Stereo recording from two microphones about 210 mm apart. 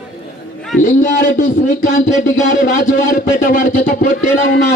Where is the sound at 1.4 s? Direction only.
35° left (ahead or behind).